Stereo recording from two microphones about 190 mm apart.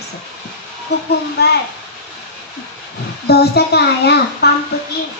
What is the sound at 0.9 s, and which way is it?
Speech, 60° left (ahead or behind).